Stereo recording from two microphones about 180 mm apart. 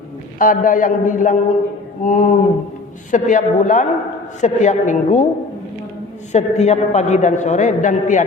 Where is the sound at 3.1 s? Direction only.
45° left (ahead or behind).